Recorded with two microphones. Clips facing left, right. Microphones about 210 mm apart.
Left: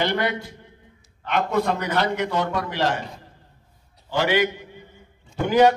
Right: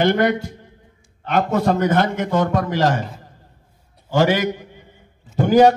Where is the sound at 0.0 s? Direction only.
50° right (ahead or behind).